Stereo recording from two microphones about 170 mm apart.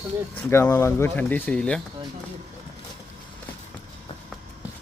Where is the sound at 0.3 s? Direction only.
10° left (ahead or behind).